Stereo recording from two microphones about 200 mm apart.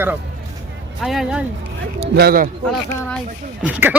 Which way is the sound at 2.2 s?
50° right (ahead or behind).